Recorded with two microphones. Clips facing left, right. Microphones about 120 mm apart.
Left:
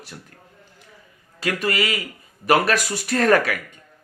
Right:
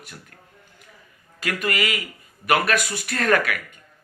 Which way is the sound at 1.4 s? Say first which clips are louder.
Left 2 dB; 30° left (ahead or behind).